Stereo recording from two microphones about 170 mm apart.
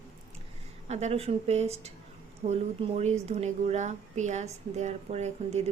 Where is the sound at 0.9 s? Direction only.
40° right (ahead or behind).